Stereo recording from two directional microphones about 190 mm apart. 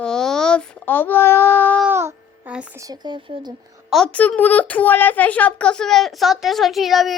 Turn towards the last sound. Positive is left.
turn(degrees=0)  # may be behind; listen again after turning